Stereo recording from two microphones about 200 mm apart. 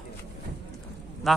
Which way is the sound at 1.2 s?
Centre (ahead or behind).